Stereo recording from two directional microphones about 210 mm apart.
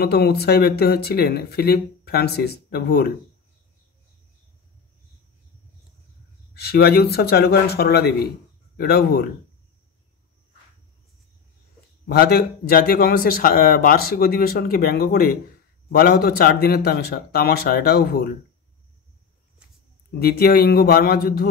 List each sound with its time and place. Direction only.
0.0 s speech: 50° left (ahead or behind)
6.5 s speech: 50° left (ahead or behind)
12.1 s speech: 50° left (ahead or behind)
20.1 s speech: 45° left (ahead or behind)